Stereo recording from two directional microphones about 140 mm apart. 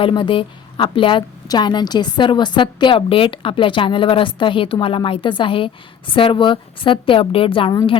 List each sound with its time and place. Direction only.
0.0 s a woman's voice: 35° left (ahead or behind)
7.7 s a woman's voice: 25° left (ahead or behind)